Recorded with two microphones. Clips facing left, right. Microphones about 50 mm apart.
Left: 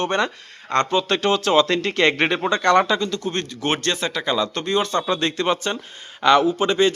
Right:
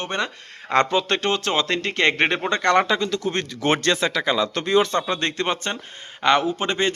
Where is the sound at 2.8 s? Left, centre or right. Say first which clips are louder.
Even; right.